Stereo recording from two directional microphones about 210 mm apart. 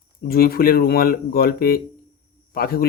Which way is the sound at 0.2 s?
45° left (ahead or behind).